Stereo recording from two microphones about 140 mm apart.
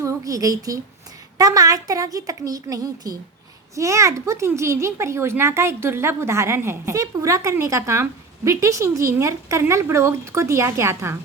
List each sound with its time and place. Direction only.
0.0 s a woman's voice: 25° right (ahead or behind)